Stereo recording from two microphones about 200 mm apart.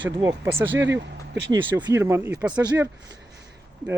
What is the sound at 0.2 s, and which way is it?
Speech, 15° right (ahead or behind).